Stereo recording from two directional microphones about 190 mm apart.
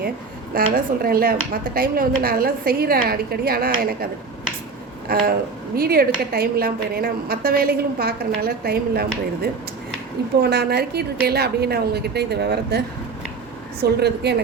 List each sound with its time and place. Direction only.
0.5 s a woman's voice: 50° right (ahead or behind)
5.1 s a woman's voice: 50° right (ahead or behind)
10.4 s a woman's voice: 60° right (ahead or behind)
13.8 s a woman's voice: 60° right (ahead or behind)